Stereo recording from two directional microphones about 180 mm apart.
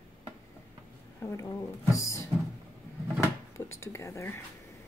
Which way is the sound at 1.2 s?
15° left (ahead or behind).